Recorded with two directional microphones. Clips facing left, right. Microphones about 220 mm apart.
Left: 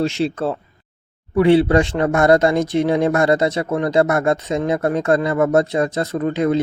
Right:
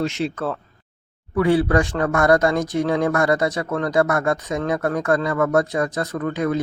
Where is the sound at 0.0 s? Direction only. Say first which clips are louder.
Left 4 dB; 30° left (ahead or behind).